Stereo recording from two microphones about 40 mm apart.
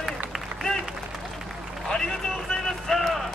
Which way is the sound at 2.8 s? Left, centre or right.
Centre.